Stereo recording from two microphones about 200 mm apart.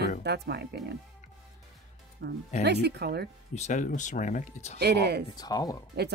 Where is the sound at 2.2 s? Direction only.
55° right (ahead or behind).